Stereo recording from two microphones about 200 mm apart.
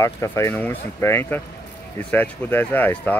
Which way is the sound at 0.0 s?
15° left (ahead or behind).